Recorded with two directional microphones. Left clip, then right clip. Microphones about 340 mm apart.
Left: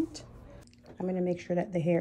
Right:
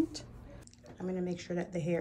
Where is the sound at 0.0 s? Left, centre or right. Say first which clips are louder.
Even; centre.